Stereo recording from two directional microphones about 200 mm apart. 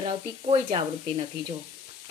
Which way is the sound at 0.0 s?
25° right (ahead or behind).